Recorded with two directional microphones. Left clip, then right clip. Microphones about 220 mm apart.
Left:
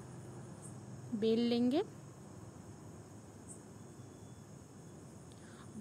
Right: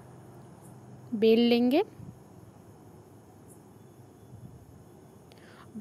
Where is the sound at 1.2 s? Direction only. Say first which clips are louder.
Right 10 dB; 30° right (ahead or behind).